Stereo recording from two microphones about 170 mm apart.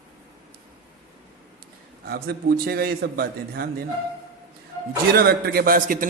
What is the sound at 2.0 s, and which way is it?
A man's voice, 65° right (ahead or behind).